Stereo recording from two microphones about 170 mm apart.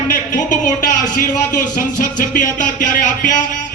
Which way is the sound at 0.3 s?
50° left (ahead or behind).